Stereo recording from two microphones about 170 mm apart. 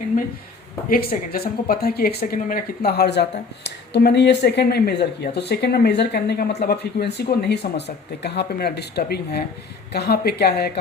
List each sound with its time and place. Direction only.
0.9 s speech: 60° left (ahead or behind)